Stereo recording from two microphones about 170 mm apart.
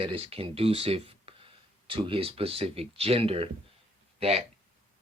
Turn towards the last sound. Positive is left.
turn(degrees=-40)  # may be behind; listen again after turning